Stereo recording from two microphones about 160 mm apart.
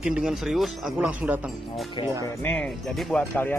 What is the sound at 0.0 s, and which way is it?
Speech, 5° right (ahead or behind).